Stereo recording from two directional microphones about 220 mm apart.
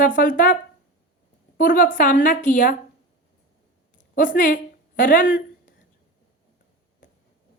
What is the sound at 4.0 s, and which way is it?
Speech, 35° left (ahead or behind).